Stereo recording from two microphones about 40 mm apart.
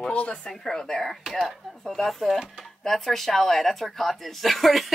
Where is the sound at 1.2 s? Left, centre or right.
Centre.